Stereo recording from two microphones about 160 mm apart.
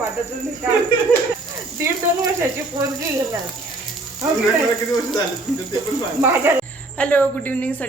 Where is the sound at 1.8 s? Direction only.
15° right (ahead or behind).